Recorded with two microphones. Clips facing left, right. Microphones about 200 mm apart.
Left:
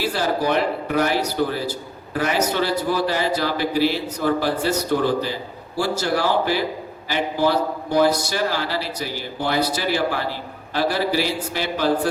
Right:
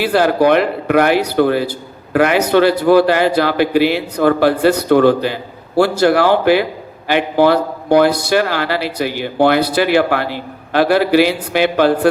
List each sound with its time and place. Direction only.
0.0 s a man's voice: 65° right (ahead or behind)